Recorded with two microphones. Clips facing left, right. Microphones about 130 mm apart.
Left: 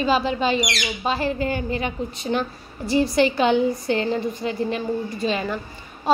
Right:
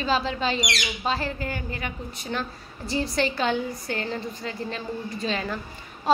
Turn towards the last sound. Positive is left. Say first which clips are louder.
# left 4 dB
turn(degrees=10)  # may be behind; listen again after turning